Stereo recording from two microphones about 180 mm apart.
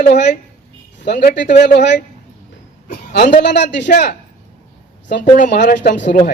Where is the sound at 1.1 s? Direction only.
50° left (ahead or behind).